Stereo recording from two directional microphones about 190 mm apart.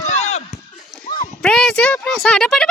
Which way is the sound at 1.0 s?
45° left (ahead or behind).